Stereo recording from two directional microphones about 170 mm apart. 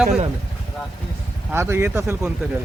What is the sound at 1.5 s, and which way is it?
Speech, 15° right (ahead or behind).